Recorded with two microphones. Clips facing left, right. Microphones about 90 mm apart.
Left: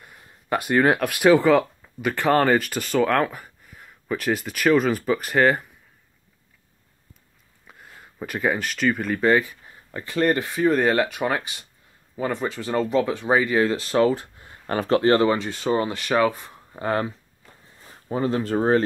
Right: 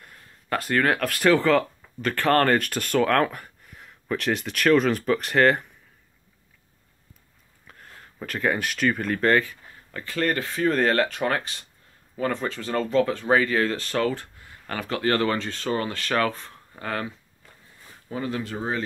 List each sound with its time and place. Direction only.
0.0 s speech: 10° left (ahead or behind)
7.6 s a sound: 10° left (ahead or behind)
8.5 s speech: centre (ahead or behind)
9.5 s speech: 20° left (ahead or behind)
16.8 s speech: 25° left (ahead or behind)
18.1 s speech: 30° left (ahead or behind)